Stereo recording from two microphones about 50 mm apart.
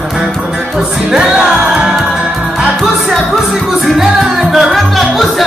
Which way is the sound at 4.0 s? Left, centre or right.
Centre.